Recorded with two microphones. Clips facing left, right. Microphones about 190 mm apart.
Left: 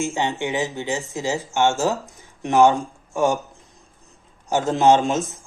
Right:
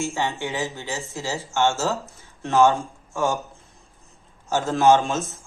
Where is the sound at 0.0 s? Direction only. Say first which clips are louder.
Left 3 dB; 20° left (ahead or behind).